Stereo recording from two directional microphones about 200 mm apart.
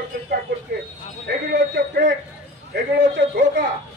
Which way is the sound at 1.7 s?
50° right (ahead or behind).